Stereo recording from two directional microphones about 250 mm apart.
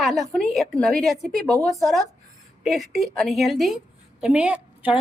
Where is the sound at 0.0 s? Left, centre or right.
Centre.